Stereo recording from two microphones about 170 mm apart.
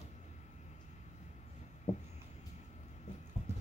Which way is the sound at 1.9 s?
40° left (ahead or behind).